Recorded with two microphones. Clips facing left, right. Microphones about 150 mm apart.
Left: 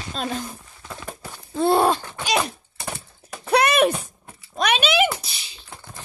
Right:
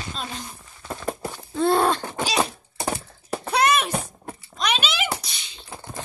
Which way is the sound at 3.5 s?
60° left (ahead or behind).